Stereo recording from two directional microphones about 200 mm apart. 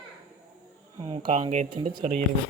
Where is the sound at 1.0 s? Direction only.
25° right (ahead or behind).